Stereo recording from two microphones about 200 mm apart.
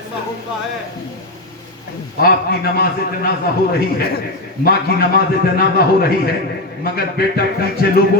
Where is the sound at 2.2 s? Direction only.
50° left (ahead or behind).